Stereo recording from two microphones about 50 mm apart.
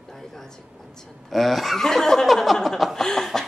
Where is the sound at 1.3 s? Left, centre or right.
Centre.